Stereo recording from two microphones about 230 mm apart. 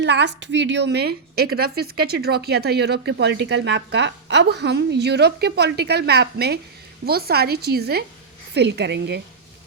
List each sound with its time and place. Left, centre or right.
0.0 s a woman's voice: right